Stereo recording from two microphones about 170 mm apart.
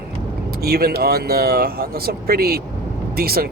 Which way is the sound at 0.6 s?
65° right (ahead or behind).